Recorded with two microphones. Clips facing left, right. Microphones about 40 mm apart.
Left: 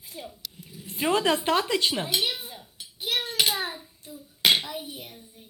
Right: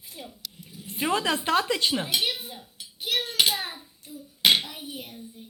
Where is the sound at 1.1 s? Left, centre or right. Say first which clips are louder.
Left 1 dB; left.